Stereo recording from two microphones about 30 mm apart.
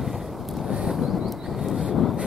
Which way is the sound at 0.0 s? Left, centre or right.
Centre.